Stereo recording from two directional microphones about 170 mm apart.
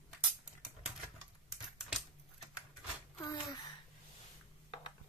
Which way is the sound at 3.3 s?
25° left (ahead or behind).